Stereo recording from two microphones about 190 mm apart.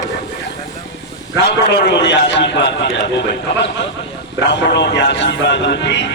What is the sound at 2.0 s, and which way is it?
Speech, 70° left (ahead or behind).